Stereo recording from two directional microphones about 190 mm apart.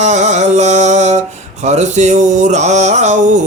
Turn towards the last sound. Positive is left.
turn(degrees=-40)  # may be behind; listen again after turning